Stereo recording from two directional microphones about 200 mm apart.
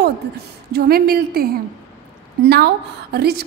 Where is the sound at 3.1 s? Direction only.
50° right (ahead or behind).